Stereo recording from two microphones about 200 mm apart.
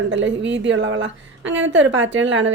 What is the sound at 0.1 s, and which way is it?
A woman's voice, 65° right (ahead or behind).